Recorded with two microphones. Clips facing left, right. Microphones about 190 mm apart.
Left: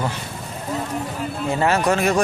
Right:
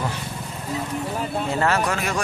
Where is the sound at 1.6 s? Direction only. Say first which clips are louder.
Left 7 dB; 30° left (ahead or behind).